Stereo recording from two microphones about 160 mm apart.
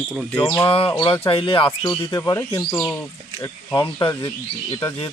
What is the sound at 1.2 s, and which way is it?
Speech, 35° left (ahead or behind).